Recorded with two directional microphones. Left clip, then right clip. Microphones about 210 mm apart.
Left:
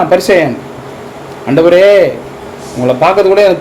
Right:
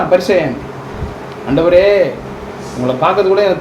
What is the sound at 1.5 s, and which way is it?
Speech, 35° left (ahead or behind).